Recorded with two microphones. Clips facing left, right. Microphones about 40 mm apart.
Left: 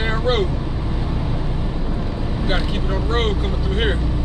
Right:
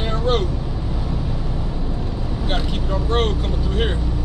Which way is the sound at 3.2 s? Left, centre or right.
Left.